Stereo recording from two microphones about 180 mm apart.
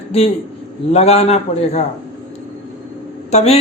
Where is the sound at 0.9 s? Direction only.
35° left (ahead or behind).